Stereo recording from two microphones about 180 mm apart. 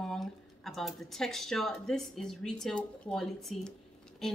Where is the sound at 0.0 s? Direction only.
Centre (ahead or behind).